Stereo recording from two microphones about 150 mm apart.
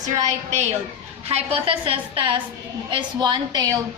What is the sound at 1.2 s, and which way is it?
A woman's voice, 40° right (ahead or behind).